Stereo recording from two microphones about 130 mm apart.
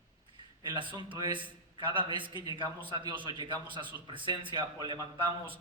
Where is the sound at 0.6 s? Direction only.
35° right (ahead or behind).